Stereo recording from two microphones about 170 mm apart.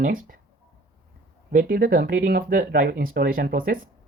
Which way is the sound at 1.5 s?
55° right (ahead or behind).